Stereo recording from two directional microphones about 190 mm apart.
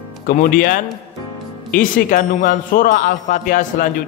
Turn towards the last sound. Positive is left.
turn(degrees=45)  # may be behind; listen again after turning